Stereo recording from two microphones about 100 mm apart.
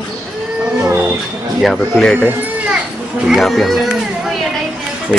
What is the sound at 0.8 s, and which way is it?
Music, 15° right (ahead or behind).